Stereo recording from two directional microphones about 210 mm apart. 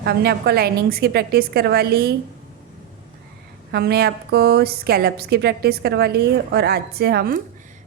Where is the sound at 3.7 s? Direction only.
50° right (ahead or behind).